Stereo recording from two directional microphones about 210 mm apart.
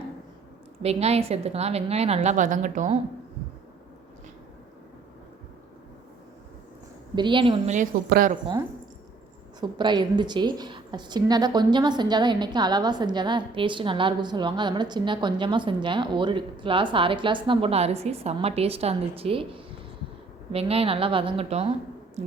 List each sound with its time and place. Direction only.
0.8 s a woman's voice: 30° right (ahead or behind)
7.2 s a woman's voice: 25° right (ahead or behind)
7.7 s speech: 40° right (ahead or behind)
9.6 s a woman's voice: 20° right (ahead or behind)